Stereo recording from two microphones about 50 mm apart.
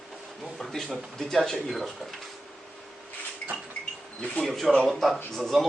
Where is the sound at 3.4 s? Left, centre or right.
Left.